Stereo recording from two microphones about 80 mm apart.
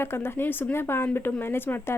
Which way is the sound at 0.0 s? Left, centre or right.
Left.